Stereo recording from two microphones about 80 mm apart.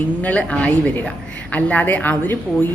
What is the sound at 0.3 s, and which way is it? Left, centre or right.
Speech, centre.